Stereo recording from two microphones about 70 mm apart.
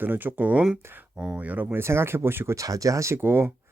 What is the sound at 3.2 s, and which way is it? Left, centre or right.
Speech, right.